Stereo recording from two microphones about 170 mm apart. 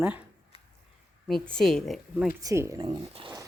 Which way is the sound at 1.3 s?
5° left (ahead or behind).